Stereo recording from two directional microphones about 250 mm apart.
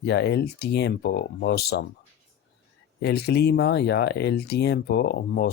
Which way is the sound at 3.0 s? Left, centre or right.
Left.